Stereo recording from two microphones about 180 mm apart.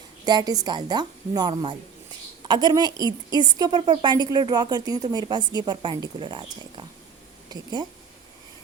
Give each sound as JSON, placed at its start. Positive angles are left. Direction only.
{"t": 0.3, "sound": "a woman's voice", "side_deg": -20}